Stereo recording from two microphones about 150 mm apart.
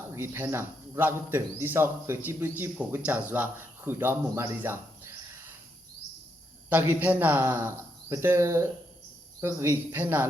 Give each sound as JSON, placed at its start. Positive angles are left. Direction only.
{"t": 0.1, "sound": "a man's voice", "side_deg": -15}
{"t": 6.7, "sound": "a man's voice", "side_deg": -10}